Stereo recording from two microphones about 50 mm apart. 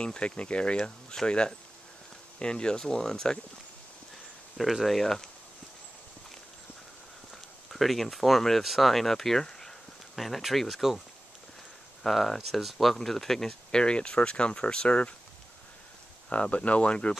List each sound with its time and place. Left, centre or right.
0.0 s speech: left
4.6 s speech: centre
7.7 s speech: centre
12.0 s speech: centre; by 15.1 s left
16.3 s speech: left